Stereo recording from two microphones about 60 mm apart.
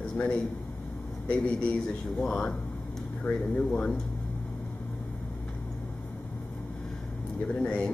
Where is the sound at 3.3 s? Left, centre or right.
Left.